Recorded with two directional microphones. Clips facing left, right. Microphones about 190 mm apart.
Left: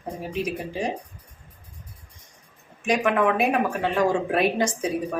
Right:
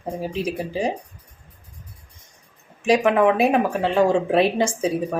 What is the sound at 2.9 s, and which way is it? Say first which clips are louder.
Speech: right 5 dB; 30° right (ahead or behind).